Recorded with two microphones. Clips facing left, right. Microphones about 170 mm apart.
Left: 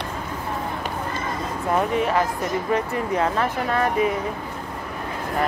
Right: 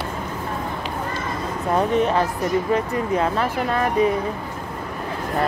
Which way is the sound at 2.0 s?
5° left (ahead or behind).